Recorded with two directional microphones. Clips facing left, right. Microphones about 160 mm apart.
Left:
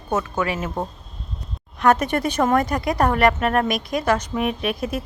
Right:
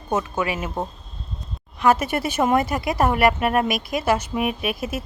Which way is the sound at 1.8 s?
Centre (ahead or behind).